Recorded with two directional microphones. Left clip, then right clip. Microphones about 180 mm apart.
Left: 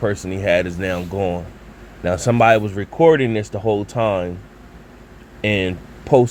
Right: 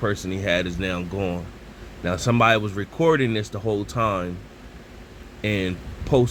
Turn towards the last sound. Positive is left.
turn(degrees=25)  # may be behind; listen again after turning